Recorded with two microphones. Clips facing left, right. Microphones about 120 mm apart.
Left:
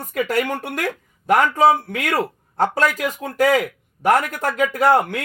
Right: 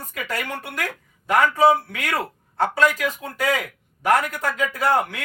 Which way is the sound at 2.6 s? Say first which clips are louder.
Left 1 dB; 40° left (ahead or behind).